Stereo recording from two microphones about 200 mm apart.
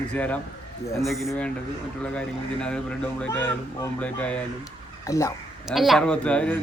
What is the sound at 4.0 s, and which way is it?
Speech, 5° left (ahead or behind).